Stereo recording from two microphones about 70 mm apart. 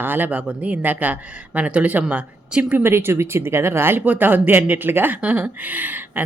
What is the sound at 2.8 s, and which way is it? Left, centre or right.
Speech, right.